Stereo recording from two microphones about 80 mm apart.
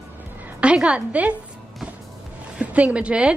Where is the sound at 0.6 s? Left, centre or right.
Centre.